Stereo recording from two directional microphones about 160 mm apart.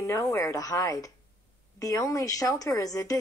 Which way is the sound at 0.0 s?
20° left (ahead or behind).